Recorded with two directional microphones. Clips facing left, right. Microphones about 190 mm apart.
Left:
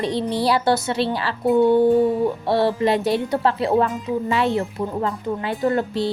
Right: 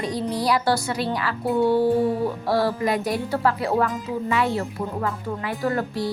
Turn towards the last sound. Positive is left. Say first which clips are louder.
# left 4 dB
turn(degrees=25)  # may be behind; listen again after turning